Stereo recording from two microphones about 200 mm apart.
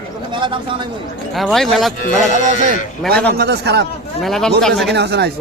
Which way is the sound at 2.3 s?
35° right (ahead or behind).